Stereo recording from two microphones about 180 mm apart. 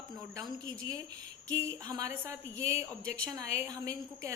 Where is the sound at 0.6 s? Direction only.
20° right (ahead or behind).